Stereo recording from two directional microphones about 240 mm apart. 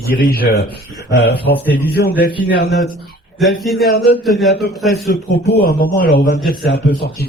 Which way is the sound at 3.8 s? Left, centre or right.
Left.